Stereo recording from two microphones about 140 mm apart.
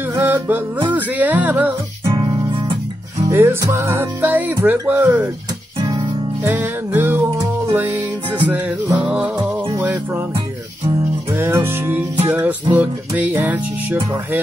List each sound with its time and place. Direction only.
0.0 s music: 15° right (ahead or behind)
2.0 s music: 30° right (ahead or behind)
3.3 s music: 20° right (ahead or behind)
6.4 s music: 10° right (ahead or behind)